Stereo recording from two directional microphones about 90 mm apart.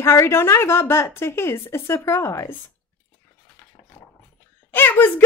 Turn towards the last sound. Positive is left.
turn(degrees=25)  # may be behind; listen again after turning